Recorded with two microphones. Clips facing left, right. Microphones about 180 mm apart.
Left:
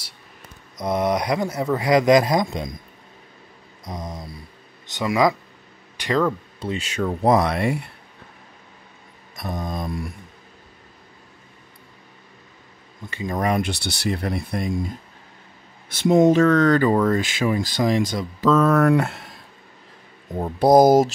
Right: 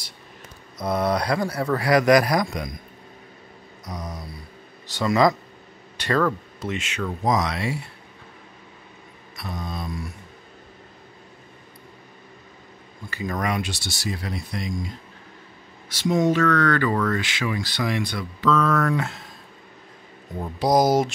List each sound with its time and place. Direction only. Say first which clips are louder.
0.7 s speech: left 1 dB; 20° left (ahead or behind)
3.8 s speech: left 2 dB; 20° left (ahead or behind)
6.6 s speech: left 4 dB; 35° left (ahead or behind)
7.2 s speech: left 5 dB; 55° left (ahead or behind)
9.4 s speech: left 4 dB; 45° left (ahead or behind)
13.1 s speech: left 3 dB; 25° left (ahead or behind)
13.5 s speech: left 5 dB; 55° left (ahead or behind)
16.0 s speech: left 5 dB; 50° left (ahead or behind)
16.4 s speech: left 5 dB; 20° left (ahead or behind)
17.2 s speech: left 5 dB; 45° left (ahead or behind)
18.9 s speech: left 6 dB; 60° left (ahead or behind)
20.3 s speech: left 6 dB; 50° left (ahead or behind)